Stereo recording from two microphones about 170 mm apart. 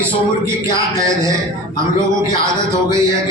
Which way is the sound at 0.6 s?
20° right (ahead or behind).